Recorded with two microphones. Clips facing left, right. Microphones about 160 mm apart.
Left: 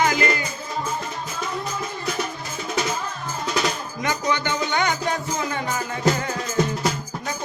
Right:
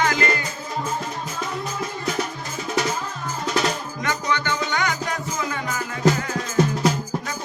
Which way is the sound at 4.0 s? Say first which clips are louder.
Left 2 dB; 15° left (ahead or behind).